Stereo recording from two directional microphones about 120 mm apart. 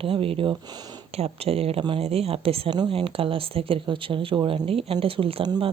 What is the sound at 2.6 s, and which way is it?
Speech, 35° right (ahead or behind).